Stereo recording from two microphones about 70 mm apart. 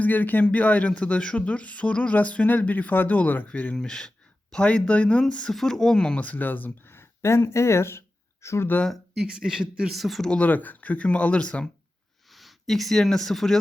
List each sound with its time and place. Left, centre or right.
0.0 s speech: left
5.5 s speech: centre
6.2 s speech: left
9.2 s speech: centre
10.2 s speech: centre
12.3 s speech: centre